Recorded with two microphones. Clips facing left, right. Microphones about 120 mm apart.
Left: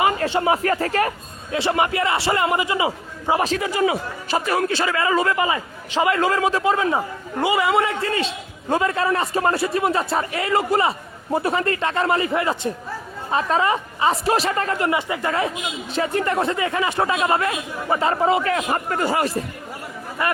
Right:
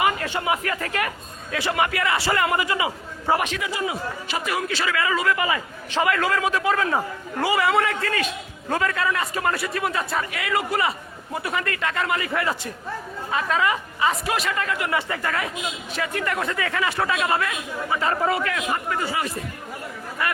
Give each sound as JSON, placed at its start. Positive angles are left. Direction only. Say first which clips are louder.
{"t": 0.0, "sound": "a man's voice", "louder": "left 4 dB", "side_deg": 30}
{"t": 3.4, "sound": "a woman's voice", "louder": "left 6 dB", "side_deg": 40}
{"t": 14.8, "sound": "a man's voice", "louder": "left 3 dB", "side_deg": 15}
{"t": 18.5, "sound": "a man's voice", "louder": "left 4 dB", "side_deg": 45}